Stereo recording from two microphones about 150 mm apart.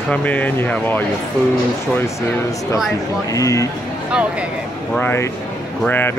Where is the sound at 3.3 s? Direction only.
20° left (ahead or behind).